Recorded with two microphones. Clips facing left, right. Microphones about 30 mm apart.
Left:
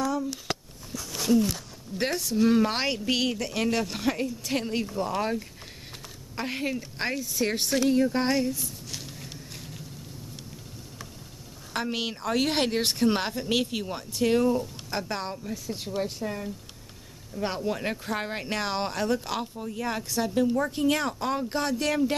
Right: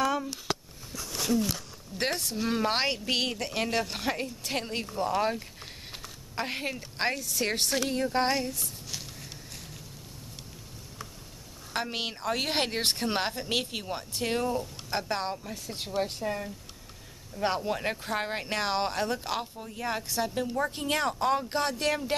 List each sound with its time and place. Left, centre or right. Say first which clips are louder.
0.0 s a sound: even; right
2.0 s speech: left 1 dB; centre
2.3 s speech: left 8 dB; centre
5.9 s a sound: even; centre
7.3 s a woman's voice: left 2 dB; right
7.7 s speech: left 5 dB; centre
8.9 s a sound: left 1 dB; centre
11.7 s speech: left 2 dB; centre
15.0 s speech: right 1 dB; centre
15.5 s speech: left 3 dB; right
16.3 s speech: even; centre
19.4 s speech: left 3 dB; centre